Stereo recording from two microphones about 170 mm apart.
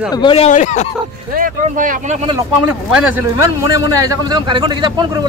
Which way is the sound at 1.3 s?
50° right (ahead or behind).